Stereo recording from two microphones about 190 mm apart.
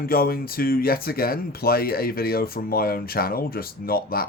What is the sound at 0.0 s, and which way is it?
Speech, 50° left (ahead or behind).